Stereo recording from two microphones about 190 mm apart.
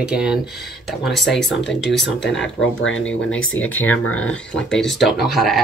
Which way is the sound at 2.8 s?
85° left.